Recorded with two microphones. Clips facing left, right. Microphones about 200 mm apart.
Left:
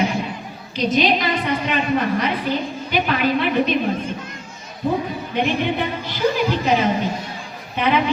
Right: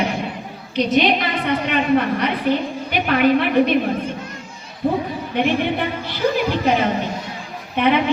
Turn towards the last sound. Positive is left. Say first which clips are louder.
# right 2 dB
turn(degrees=-60)  # may be behind; listen again after turning